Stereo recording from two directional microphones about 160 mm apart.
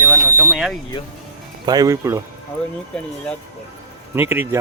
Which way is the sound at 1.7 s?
20° right (ahead or behind).